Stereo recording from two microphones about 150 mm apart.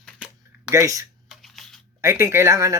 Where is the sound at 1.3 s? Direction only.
Centre (ahead or behind).